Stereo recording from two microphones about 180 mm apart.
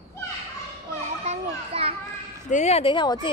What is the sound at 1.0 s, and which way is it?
Children playing, 40° right (ahead or behind).